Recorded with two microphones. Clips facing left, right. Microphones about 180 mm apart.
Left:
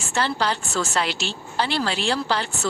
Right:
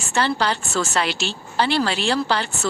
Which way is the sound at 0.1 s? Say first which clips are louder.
Right 2 dB; 70° right (ahead or behind).